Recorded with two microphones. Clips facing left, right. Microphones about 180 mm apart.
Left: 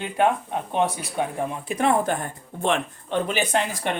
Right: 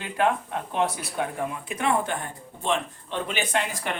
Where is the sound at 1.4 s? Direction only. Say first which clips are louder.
Left 4 dB; 35° left (ahead or behind).